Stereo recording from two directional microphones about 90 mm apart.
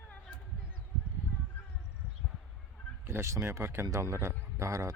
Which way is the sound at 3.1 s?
30° right (ahead or behind).